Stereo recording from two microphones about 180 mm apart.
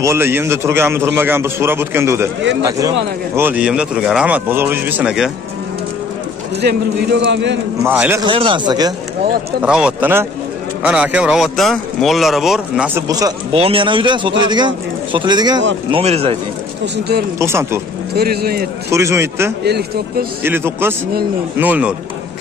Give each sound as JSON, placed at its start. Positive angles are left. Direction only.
{"t": 0.0, "sound": "a man's voice", "side_deg": -15}
{"t": 3.3, "sound": "a man's voice", "side_deg": -10}
{"t": 6.6, "sound": "a man's voice", "side_deg": -60}
{"t": 7.8, "sound": "a man's voice", "side_deg": -10}
{"t": 8.2, "sound": "a man's voice", "side_deg": -25}
{"t": 9.6, "sound": "a man's voice", "side_deg": -5}
{"t": 13.1, "sound": "a man's voice", "side_deg": -20}
{"t": 15.9, "sound": "speech", "side_deg": -35}
{"t": 16.8, "sound": "speech", "side_deg": -70}
{"t": 17.4, "sound": "a man's voice", "side_deg": -15}
{"t": 18.1, "sound": "a man's voice", "side_deg": -60}
{"t": 18.9, "sound": "a man's voice", "side_deg": -15}
{"t": 19.6, "sound": "a man's voice", "side_deg": -65}
{"t": 20.4, "sound": "a man's voice", "side_deg": -10}